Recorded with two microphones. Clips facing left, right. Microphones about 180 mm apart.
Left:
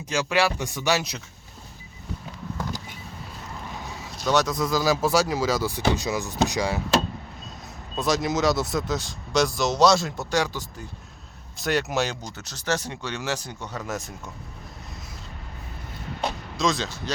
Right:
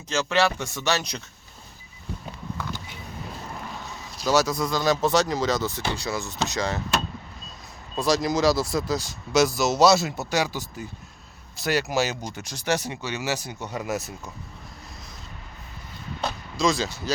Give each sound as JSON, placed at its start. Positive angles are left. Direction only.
{"t": 0.1, "sound": "speech", "side_deg": 10}
{"t": 4.2, "sound": "speech", "side_deg": 0}
{"t": 7.9, "sound": "speech", "side_deg": 0}
{"t": 16.6, "sound": "speech", "side_deg": 0}